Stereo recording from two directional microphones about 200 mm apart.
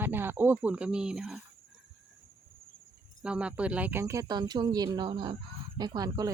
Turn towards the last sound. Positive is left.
turn(degrees=-20)  # may be behind; listen again after turning